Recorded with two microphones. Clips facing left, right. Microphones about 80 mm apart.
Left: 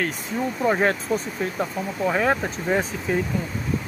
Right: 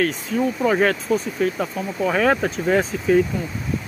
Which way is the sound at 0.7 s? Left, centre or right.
Left.